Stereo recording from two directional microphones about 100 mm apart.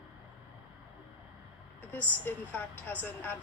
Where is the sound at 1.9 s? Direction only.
20° left (ahead or behind).